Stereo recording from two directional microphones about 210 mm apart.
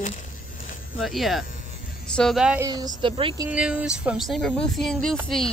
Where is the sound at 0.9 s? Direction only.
Centre (ahead or behind).